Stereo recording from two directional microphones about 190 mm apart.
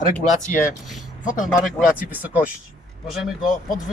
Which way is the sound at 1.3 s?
40° left (ahead or behind).